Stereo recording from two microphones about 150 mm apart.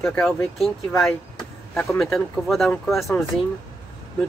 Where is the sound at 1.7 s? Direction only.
15° left (ahead or behind).